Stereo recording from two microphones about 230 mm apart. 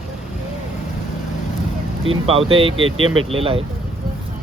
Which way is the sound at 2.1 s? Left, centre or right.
Right.